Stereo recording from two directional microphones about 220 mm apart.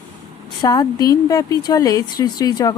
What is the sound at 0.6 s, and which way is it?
A woman's voice, 15° left (ahead or behind).